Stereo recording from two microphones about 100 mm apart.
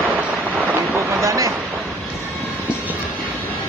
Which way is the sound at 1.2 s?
30° right (ahead or behind).